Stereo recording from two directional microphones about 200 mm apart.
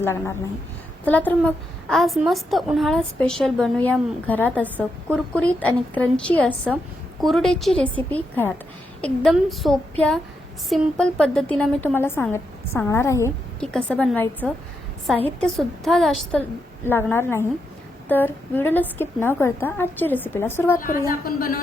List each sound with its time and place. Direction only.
0.0 s a woman's voice: 15° left (ahead or behind)
16.8 s a woman's voice: 10° left (ahead or behind)
21.1 s a woman's voice: 45° left (ahead or behind)